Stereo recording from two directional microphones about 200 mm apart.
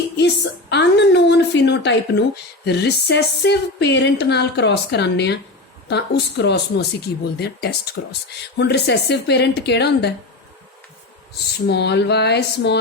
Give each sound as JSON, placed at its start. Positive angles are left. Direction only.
{"t": 0.7, "sound": "speech", "side_deg": 60}
{"t": 11.7, "sound": "speech", "side_deg": 55}